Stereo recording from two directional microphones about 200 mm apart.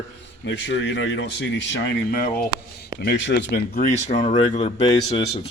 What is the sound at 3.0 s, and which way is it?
Speech, 60° left (ahead or behind).